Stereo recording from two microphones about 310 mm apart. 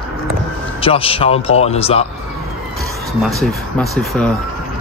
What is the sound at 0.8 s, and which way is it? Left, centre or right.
Speech, centre.